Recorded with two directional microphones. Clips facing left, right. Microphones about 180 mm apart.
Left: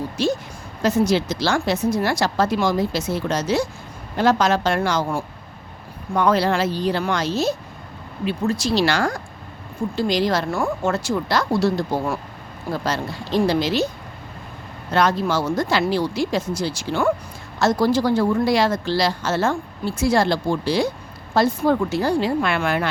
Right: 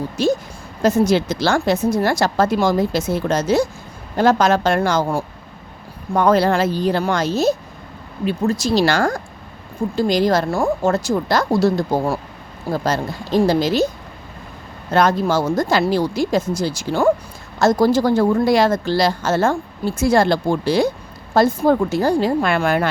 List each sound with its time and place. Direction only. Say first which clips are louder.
0.2 s speech: right 4 dB; 45° right (ahead or behind)
14.9 s speech: right 3 dB; 45° right (ahead or behind)